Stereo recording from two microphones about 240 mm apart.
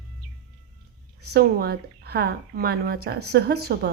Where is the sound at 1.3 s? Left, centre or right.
Right.